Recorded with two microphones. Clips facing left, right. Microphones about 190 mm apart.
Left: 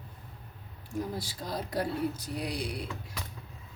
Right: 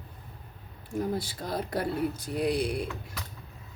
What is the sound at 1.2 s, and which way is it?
Speech, 55° right (ahead or behind).